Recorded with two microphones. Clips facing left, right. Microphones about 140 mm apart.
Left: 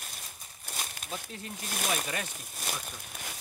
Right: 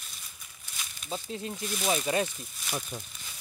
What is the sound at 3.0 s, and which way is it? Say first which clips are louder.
Crumpling: left 7 dB; 65° left (ahead or behind).